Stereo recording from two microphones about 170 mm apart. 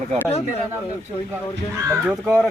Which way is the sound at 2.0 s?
5° right (ahead or behind).